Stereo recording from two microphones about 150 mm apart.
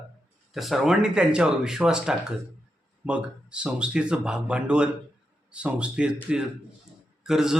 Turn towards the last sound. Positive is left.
turn(degrees=-5)  # may be behind; listen again after turning